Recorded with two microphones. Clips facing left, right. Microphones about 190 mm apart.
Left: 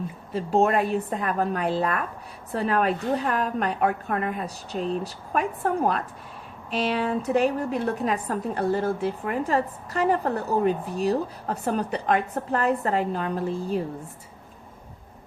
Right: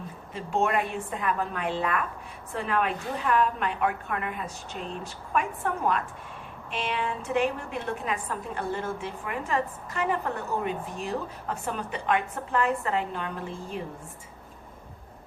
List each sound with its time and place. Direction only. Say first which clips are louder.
0.3 s a woman's voice: left 5 dB; 35° left (ahead or behind)